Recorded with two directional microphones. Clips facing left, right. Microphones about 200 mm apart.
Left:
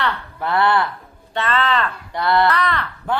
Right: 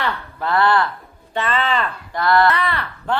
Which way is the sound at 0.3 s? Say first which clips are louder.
Right 1 dB; 20° left (ahead or behind).